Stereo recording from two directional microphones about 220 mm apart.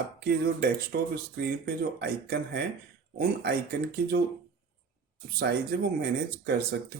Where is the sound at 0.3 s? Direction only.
45° right (ahead or behind).